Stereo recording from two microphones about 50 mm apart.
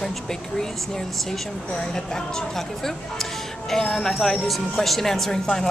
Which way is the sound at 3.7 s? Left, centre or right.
Centre.